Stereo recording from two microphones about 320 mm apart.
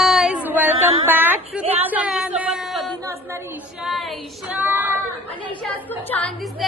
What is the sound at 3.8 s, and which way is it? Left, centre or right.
Speech, centre.